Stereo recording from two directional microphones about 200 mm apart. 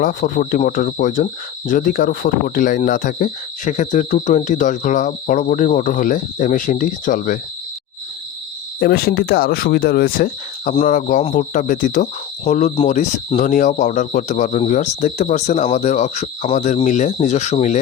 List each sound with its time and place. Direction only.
0.0 s speech: 45° left (ahead or behind)
8.8 s speech: 50° left (ahead or behind)